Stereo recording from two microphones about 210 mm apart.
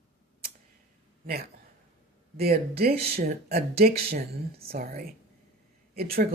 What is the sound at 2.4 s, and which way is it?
Speech, 45° right (ahead or behind).